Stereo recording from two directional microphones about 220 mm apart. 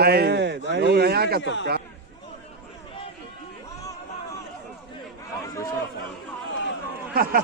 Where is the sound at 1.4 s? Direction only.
55° left (ahead or behind).